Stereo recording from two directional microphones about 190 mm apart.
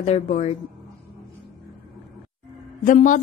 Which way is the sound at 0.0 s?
35° left (ahead or behind).